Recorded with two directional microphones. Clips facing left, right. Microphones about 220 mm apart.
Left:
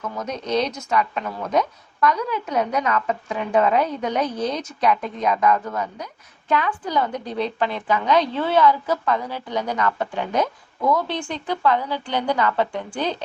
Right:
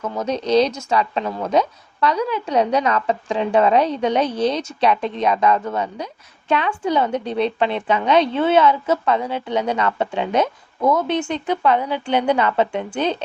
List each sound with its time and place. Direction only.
0.2 s a woman's voice: 30° right (ahead or behind)